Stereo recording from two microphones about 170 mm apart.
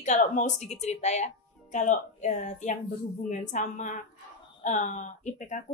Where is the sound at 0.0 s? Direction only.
45° left (ahead or behind).